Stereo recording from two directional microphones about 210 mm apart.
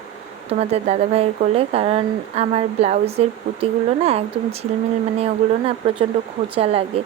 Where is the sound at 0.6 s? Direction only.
30° right (ahead or behind).